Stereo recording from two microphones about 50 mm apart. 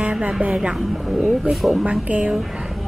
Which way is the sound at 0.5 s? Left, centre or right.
Centre.